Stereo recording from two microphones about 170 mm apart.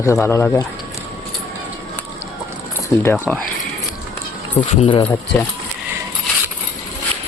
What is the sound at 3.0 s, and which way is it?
Speech, 10° left (ahead or behind).